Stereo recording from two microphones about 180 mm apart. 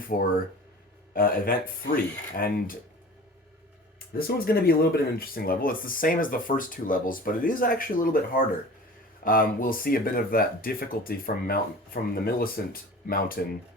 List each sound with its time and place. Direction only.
0.1 s speech: 50° left (ahead or behind)
4.2 s speech: 55° left (ahead or behind)